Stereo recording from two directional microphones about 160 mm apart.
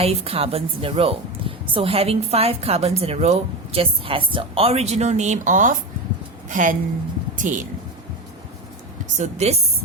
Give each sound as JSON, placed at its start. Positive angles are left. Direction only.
{"t": 0.0, "sound": "a woman's voice", "side_deg": -40}
{"t": 9.1, "sound": "speech", "side_deg": -45}